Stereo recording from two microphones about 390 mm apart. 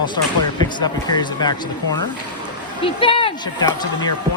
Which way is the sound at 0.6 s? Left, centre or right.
Centre.